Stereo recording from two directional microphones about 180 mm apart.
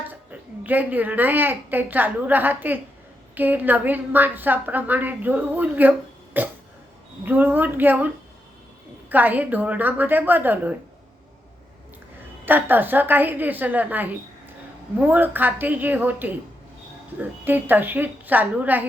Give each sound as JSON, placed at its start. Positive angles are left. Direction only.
{"t": 0.1, "sound": "a woman's voice", "side_deg": -10}
{"t": 12.5, "sound": "a woman's voice", "side_deg": -10}